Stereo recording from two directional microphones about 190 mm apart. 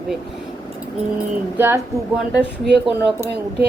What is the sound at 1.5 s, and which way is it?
Speech, 10° right (ahead or behind).